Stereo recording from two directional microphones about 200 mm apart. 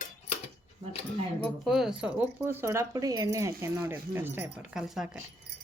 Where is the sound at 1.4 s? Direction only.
Centre (ahead or behind).